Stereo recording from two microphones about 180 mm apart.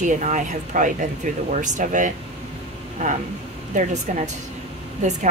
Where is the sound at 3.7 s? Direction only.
40° right (ahead or behind).